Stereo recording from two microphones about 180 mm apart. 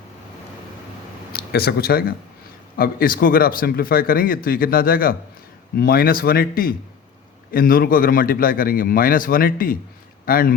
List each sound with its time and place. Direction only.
1.3 s speech: 60° left (ahead or behind)